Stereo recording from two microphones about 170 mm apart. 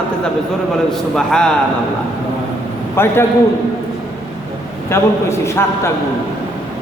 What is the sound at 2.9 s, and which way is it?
Speech, 15° left (ahead or behind).